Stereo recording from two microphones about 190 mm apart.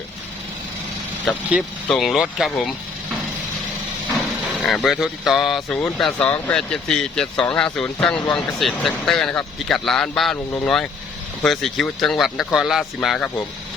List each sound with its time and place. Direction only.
1.5 s speech: centre (ahead or behind)
4.1 s speech: centre (ahead or behind)